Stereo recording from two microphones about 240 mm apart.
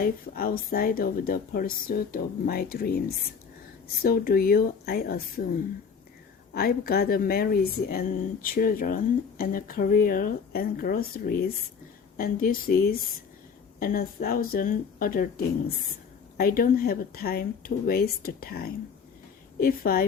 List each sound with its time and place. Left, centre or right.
0.0 s speech: left
6.5 s speech: left
16.4 s speech: left